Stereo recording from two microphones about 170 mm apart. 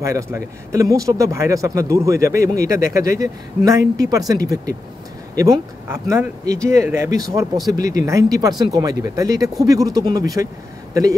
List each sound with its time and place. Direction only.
0.0 s speech: 15° right (ahead or behind)